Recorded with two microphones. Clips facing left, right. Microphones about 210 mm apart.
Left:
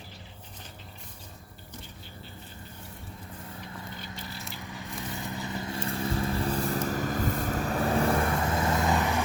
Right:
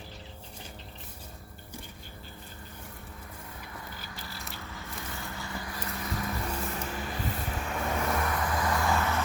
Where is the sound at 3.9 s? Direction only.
25° left (ahead or behind).